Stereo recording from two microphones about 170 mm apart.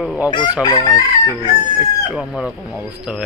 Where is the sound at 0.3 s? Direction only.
25° left (ahead or behind).